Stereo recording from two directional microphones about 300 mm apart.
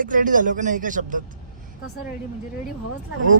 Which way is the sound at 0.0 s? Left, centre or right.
Right.